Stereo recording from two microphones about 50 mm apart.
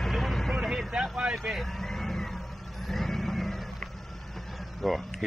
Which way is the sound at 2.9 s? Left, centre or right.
Centre.